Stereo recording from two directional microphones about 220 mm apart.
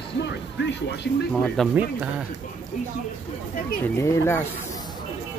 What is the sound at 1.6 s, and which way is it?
Speech, centre (ahead or behind).